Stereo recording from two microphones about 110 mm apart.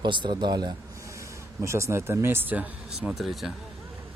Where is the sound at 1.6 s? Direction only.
25° right (ahead or behind).